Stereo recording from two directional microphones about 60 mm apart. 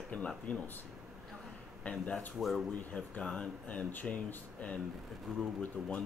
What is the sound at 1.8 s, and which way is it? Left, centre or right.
Speech, left.